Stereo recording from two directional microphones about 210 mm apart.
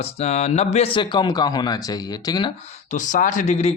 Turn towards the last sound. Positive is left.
turn(degrees=30)  # may be behind; listen again after turning